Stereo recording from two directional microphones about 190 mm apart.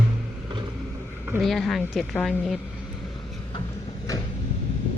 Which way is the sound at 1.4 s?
Centre (ahead or behind).